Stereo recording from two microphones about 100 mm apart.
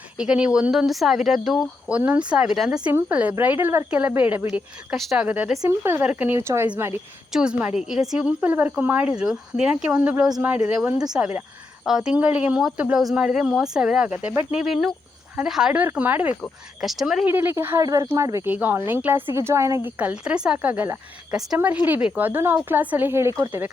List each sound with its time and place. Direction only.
0.2 s speech: 10° right (ahead or behind)
1.9 s speech: 15° right (ahead or behind)
7.3 s speech: 10° right (ahead or behind)
8.4 s speech: 20° right (ahead or behind)
9.1 s speech: 5° right (ahead or behind)
16.0 s speech: 15° right (ahead or behind)
16.8 s speech: centre (ahead or behind)
17.2 s speech: 20° right (ahead or behind)
17.8 s speech: 40° right (ahead or behind)
18.4 s speech: 15° right (ahead or behind)
20.0 s speech: 10° right (ahead or behind)